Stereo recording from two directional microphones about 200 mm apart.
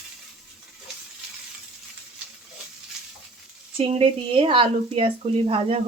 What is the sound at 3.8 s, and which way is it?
A woman's voice, 25° right (ahead or behind).